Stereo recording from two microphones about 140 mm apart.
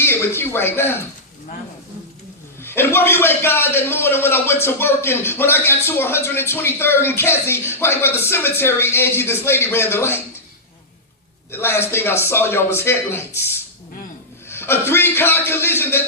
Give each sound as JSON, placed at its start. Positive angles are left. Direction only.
{"t": 0.0, "sound": "speech", "side_deg": 15}
{"t": 2.6, "sound": "a man's voice", "side_deg": 15}
{"t": 11.5, "sound": "a man's voice", "side_deg": 15}